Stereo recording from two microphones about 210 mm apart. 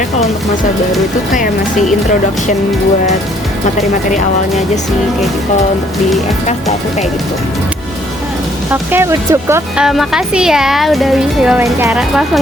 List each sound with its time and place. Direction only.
3.8 s speech: 35° left (ahead or behind)
8.7 s speech: 10° right (ahead or behind)
11.9 s speech: centre (ahead or behind)